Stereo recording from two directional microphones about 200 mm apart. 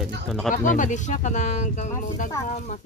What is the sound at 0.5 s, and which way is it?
Speech, 40° left (ahead or behind).